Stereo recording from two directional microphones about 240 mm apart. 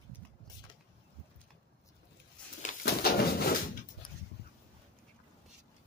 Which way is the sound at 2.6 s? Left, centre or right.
Left.